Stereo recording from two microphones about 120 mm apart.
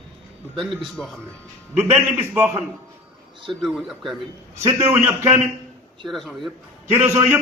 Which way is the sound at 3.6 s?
Centre (ahead or behind).